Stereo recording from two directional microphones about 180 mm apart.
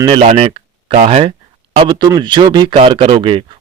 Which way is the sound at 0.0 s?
25° right (ahead or behind).